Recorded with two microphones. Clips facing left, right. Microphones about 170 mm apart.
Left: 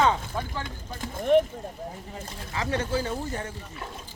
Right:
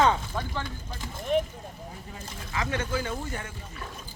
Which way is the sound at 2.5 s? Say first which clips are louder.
Left 2 dB; 35° left (ahead or behind).